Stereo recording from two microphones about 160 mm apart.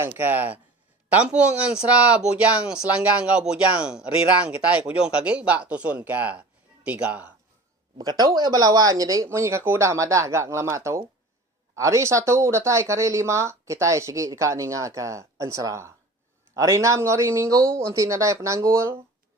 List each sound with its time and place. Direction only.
0.2 s speech: 10° right (ahead or behind)
7.9 s speech: 25° right (ahead or behind)